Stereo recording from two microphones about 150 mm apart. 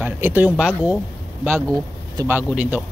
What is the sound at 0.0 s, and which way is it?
Speech, 15° right (ahead or behind).